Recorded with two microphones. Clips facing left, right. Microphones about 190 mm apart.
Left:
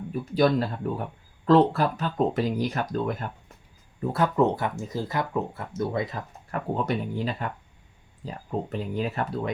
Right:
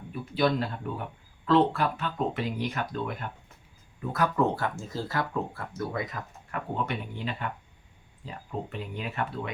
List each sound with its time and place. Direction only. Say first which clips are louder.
0.1 s speech: left 4 dB; 40° left (ahead or behind)
4.0 s speech: left 4 dB; 30° left (ahead or behind)